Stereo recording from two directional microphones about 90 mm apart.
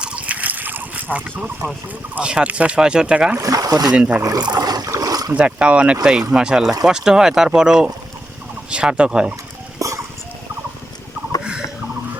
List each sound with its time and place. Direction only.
0.0 s a sound: 15° right (ahead or behind)
2.1 s speech: 10° right (ahead or behind)
3.3 s speech: 40° right (ahead or behind)
3.9 s speech: 15° right (ahead or behind)
4.2 s speech: 40° right (ahead or behind)
4.5 s boat: 45° right (ahead or behind)
5.3 s speech: 10° right (ahead or behind)
9.7 s a sound: 35° right (ahead or behind)